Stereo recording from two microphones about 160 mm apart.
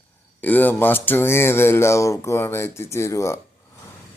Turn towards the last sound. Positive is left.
turn(degrees=20)  # may be behind; listen again after turning